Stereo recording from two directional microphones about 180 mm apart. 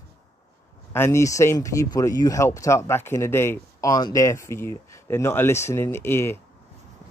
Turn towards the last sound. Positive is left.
turn(degrees=15)  # may be behind; listen again after turning